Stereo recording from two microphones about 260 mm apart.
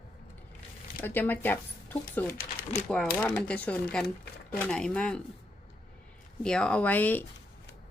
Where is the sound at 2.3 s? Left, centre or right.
Left.